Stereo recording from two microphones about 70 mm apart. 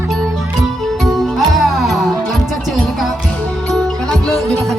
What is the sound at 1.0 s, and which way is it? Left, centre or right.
Music, centre.